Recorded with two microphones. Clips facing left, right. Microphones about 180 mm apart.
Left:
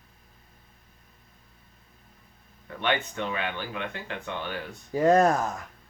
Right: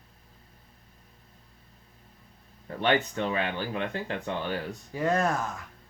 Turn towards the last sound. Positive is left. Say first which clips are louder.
# left 6 dB
turn(degrees=40)  # may be behind; listen again after turning